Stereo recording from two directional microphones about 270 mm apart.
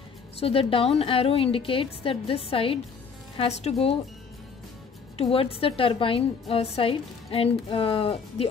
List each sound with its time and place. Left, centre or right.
0.4 s a woman's voice: left
5.1 s a woman's voice: left